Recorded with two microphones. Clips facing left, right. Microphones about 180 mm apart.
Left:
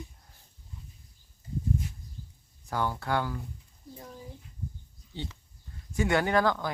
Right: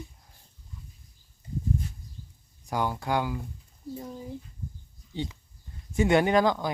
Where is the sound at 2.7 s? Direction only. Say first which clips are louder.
Right 2 dB; 15° right (ahead or behind).